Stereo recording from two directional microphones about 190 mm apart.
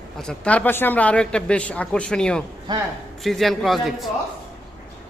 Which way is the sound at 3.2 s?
Centre (ahead or behind).